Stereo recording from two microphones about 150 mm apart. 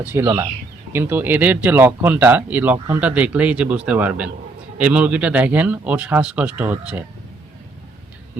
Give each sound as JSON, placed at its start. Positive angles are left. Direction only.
{"t": 0.0, "sound": "speech", "side_deg": -15}